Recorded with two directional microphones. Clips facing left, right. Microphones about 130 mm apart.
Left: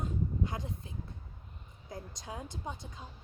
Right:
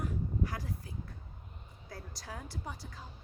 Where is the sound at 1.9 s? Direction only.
20° left (ahead or behind).